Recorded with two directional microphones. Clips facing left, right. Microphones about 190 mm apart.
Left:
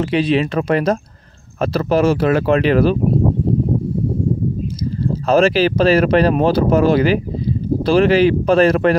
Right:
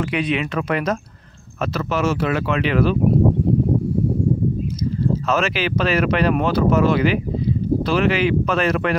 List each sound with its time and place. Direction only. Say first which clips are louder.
0.0 s speech: left 6 dB; 30° left (ahead or behind)
5.2 s speech: left 13 dB; 35° left (ahead or behind)